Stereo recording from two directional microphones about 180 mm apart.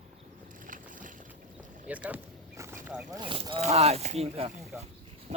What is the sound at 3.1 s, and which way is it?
Speech, 30° right (ahead or behind).